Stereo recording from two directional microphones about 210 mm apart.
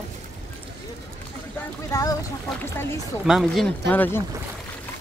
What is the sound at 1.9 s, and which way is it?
Speech, 15° left (ahead or behind).